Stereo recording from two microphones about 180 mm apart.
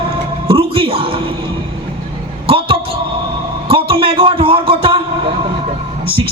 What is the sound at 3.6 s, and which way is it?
A man's voice, 30° right (ahead or behind).